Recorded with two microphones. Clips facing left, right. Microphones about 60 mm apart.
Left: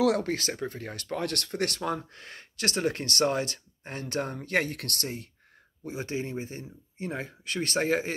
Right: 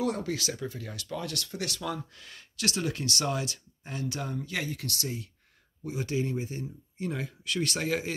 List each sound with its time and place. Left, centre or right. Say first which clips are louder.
0.2 s speech: left 2 dB; left
5.9 s speech: right 2 dB; left